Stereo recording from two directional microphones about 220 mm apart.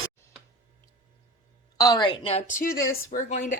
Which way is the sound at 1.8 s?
20° left (ahead or behind).